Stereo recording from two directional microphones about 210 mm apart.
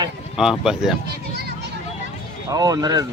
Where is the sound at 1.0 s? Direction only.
50° right (ahead or behind).